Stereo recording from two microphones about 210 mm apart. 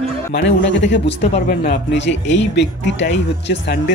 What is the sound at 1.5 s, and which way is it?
Speech, 45° left (ahead or behind).